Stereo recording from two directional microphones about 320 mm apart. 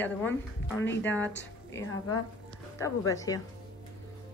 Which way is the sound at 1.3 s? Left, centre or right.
Left.